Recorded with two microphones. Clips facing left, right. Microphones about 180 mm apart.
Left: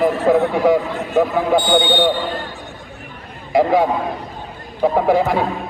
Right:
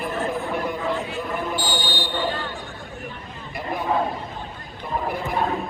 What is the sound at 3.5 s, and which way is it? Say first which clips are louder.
Speech: left 15 dB; 90° left.